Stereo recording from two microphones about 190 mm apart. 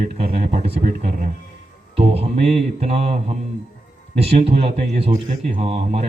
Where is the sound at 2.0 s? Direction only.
35° right (ahead or behind).